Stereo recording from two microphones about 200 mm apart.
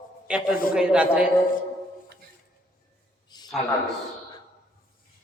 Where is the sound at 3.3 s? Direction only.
20° left (ahead or behind).